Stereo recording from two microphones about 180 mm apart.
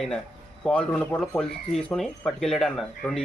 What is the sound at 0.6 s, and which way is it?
Speech, 5° left (ahead or behind).